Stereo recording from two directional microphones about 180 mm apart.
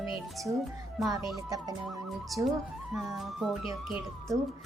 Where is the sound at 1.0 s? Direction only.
Centre (ahead or behind).